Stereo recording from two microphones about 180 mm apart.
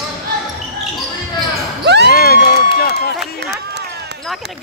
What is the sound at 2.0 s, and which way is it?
Run, 55° left (ahead or behind).